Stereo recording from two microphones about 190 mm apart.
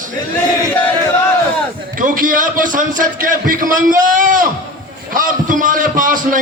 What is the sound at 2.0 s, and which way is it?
A man's voice, 45° right (ahead or behind).